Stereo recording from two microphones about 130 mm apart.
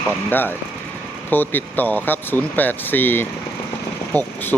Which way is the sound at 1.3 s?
15° left (ahead or behind).